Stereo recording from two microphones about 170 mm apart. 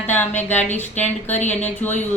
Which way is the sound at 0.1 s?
10° left (ahead or behind).